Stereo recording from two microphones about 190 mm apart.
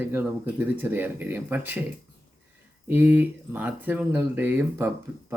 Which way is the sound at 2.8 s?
10° right (ahead or behind).